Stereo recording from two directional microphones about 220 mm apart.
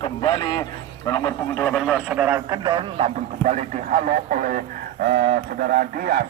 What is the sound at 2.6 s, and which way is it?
Speech, 20° right (ahead or behind).